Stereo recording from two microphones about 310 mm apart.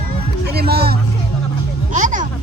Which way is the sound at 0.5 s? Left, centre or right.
Right.